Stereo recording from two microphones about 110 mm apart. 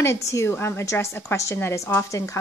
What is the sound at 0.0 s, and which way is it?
A woman's voice, 25° left (ahead or behind).